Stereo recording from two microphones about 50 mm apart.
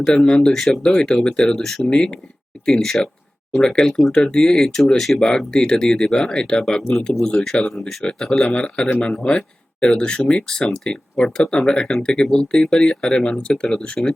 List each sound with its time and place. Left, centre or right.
0.0 s speech: centre
1.9 s speech: centre
8.3 s speech: left